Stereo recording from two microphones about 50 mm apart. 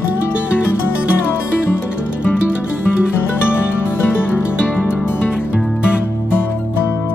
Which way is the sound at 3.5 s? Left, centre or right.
Left.